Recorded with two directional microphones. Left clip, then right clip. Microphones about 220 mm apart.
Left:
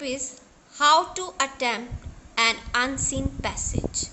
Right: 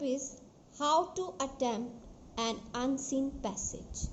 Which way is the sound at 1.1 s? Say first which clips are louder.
Left 9 dB; 5° left (ahead or behind).